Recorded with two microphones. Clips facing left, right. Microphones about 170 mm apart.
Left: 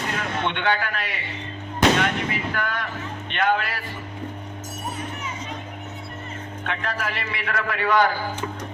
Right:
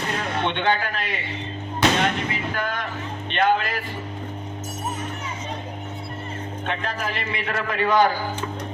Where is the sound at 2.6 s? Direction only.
25° right (ahead or behind).